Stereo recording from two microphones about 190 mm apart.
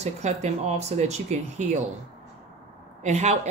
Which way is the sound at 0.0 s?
35° right (ahead or behind).